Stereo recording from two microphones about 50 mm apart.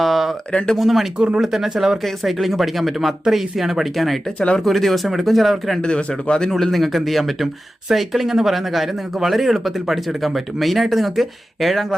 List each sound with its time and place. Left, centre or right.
0.0 s a sound: centre
0.5 s speech: centre
0.8 s speech: centre
2.0 s speech: centre
5.8 s speech: left
6.5 s speech: centre